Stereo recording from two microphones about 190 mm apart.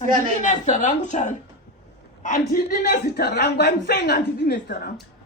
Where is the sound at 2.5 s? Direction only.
50° left (ahead or behind).